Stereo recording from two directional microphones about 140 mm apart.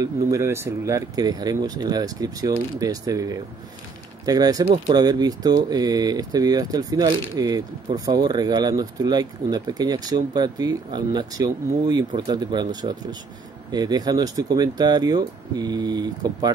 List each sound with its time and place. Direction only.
0.0 s speech: 20° right (ahead or behind)